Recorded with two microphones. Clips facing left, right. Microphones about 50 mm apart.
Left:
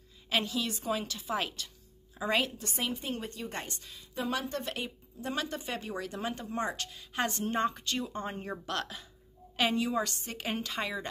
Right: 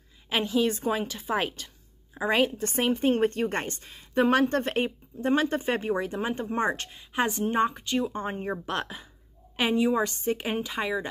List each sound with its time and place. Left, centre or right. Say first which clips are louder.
0.3 s a woman's voice: right 7 dB; right
2.5 s a woman's voice: right 9 dB; right
10.5 s speech: right 6 dB; centre